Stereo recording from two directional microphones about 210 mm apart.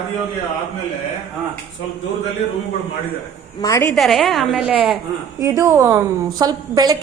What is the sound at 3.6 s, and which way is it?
Speech, 15° left (ahead or behind).